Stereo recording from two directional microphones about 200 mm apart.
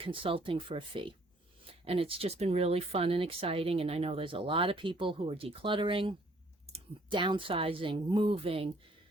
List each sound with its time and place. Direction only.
0.0 s speech: 25° right (ahead or behind)